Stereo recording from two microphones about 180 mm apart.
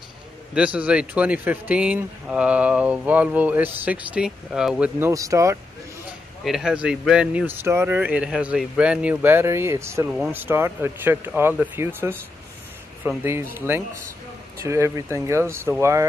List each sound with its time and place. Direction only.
0.6 s speech: 5° right (ahead or behind)
6.4 s speech: centre (ahead or behind)